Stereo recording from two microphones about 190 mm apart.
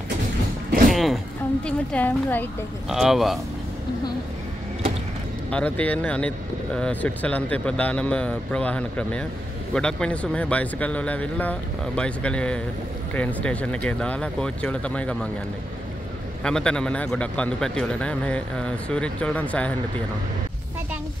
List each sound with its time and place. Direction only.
0.8 s music: centre (ahead or behind)
1.7 s speech: 5° left (ahead or behind)
2.9 s a man's voice: centre (ahead or behind)
5.5 s speech: 5° left (ahead or behind)
16.4 s a man's voice: 5° left (ahead or behind)